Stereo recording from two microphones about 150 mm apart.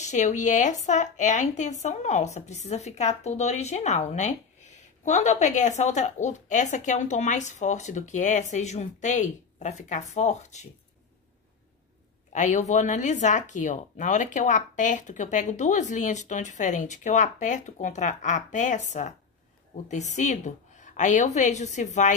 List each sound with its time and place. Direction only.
0.0 s speech: 50° left (ahead or behind)
12.3 s speech: 55° left (ahead or behind)